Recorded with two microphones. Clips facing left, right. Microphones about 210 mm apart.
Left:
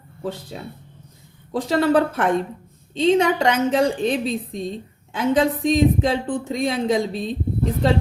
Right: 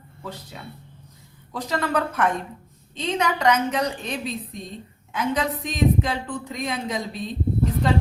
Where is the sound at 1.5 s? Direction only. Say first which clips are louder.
Left 7 dB; 30° left (ahead or behind).